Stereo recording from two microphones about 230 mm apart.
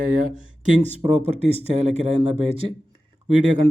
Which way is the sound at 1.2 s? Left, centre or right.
Right.